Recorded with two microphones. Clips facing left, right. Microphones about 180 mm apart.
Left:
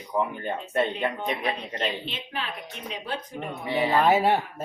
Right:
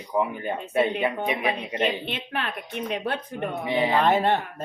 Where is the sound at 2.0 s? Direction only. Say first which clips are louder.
Right 4 dB; 60° right (ahead or behind).